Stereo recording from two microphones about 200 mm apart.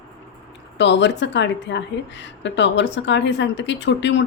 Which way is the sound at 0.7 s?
60° left (ahead or behind).